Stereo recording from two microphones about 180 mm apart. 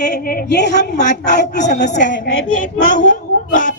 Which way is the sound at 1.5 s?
40° left (ahead or behind).